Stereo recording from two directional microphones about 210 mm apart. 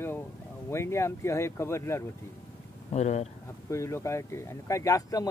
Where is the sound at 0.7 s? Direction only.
10° left (ahead or behind).